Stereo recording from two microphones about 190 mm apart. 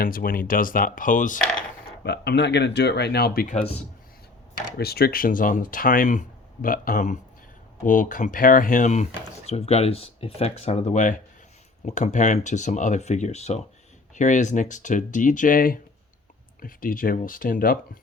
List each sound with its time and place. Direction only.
0.0 s speech: 50° left (ahead or behind)
2.0 s speech: 65° left (ahead or behind); by 3.8 s 35° left (ahead or behind)
4.8 s speech: 55° left (ahead or behind)